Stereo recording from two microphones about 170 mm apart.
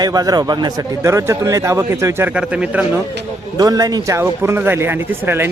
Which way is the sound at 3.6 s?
20° right (ahead or behind).